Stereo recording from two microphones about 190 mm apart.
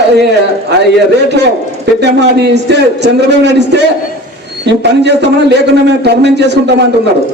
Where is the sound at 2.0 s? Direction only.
65° right (ahead or behind).